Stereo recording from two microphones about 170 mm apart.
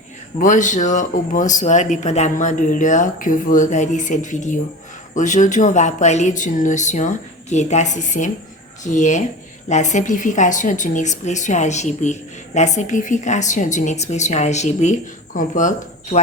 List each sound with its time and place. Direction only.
0.3 s speech: 50° left (ahead or behind)